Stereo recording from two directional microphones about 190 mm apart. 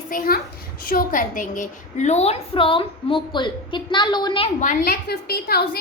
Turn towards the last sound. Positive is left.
turn(degrees=55)  # may be behind; listen again after turning